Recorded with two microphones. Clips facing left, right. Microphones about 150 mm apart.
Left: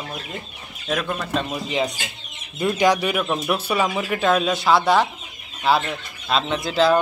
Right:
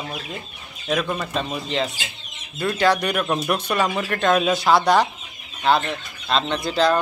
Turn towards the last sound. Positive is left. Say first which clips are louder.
# left 1 dB
turn(degrees=0)  # may be behind; listen again after turning